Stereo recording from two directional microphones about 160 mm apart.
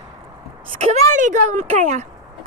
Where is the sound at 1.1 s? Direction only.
50° right (ahead or behind).